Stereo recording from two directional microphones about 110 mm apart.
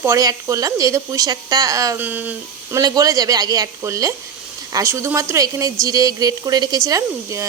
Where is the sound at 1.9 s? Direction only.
15° right (ahead or behind).